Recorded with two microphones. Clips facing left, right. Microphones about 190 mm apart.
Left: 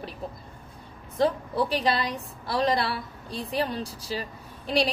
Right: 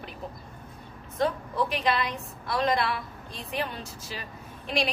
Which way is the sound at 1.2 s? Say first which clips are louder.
Left 3 dB; 35° left (ahead or behind).